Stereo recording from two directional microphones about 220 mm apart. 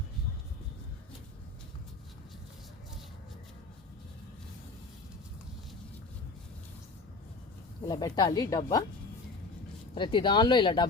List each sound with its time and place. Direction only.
7.9 s speech: 20° left (ahead or behind)
9.9 s speech: 20° left (ahead or behind)